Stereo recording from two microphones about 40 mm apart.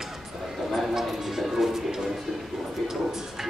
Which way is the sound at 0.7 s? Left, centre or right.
Centre.